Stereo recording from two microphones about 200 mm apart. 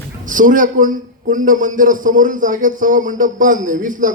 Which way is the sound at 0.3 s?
40° right (ahead or behind).